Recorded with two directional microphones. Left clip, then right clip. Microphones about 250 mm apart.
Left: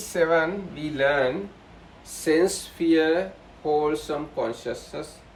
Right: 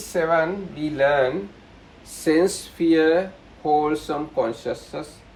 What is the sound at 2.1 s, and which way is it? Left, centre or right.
Speech, centre.